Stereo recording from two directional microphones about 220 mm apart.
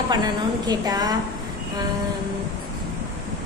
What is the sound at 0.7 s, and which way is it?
Speech, 15° right (ahead or behind).